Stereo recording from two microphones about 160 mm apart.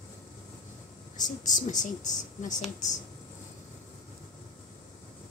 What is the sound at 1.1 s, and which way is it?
Speech, 50° left (ahead or behind).